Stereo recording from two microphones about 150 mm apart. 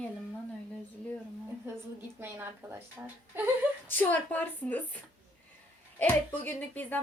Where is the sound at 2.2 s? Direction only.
15° right (ahead or behind).